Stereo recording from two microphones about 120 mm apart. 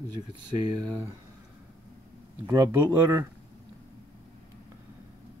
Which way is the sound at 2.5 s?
30° right (ahead or behind).